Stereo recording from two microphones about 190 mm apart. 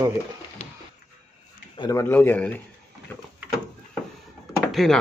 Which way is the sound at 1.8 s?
15° left (ahead or behind).